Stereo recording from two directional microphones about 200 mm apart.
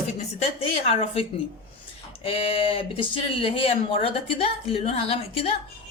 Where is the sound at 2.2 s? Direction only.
30° left (ahead or behind).